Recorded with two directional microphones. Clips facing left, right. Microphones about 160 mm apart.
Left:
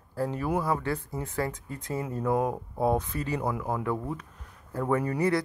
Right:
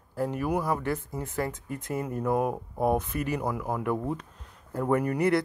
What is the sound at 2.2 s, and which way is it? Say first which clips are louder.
Speech: even; 5° right (ahead or behind).